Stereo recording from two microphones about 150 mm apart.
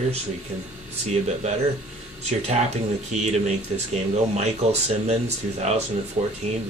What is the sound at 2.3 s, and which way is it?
Speech, 45° right (ahead or behind).